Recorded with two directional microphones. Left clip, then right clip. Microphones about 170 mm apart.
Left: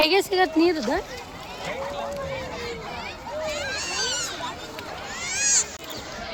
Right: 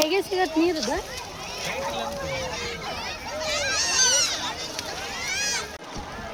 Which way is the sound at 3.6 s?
40° right (ahead or behind).